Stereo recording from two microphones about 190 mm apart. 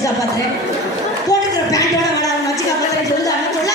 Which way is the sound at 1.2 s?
20° left (ahead or behind).